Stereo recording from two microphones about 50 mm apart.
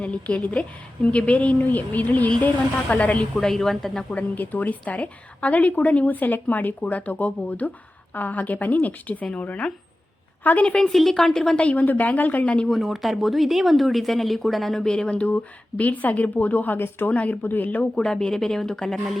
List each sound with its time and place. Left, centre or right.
0.0 s a woman's voice: left
1.5 s a woman's voice: left
3.4 s speech: centre
4.1 s a woman's voice: left
10.9 s speech: centre
11.5 s a woman's voice: left
12.8 s speech: centre
14.8 s a woman's voice: left
17.4 s a woman's voice: left
17.9 s speech: centre